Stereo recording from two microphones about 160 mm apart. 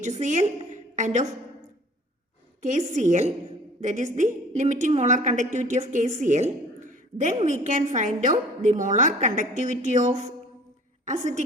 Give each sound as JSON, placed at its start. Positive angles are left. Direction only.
{"t": 0.0, "sound": "a woman's voice", "side_deg": -50}
{"t": 2.6, "sound": "a woman's voice", "side_deg": -50}